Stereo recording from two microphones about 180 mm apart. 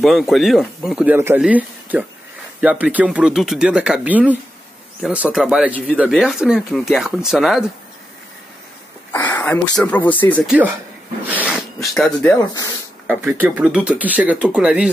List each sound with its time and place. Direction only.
0.0 s speech: centre (ahead or behind)
9.1 s speech: 15° left (ahead or behind)
10.4 s speech: 5° right (ahead or behind)
11.2 s dog: 5° right (ahead or behind)
12.0 s speech: 5° left (ahead or behind)
12.4 s speech: 20° left (ahead or behind)
13.0 s speech: 10° right (ahead or behind)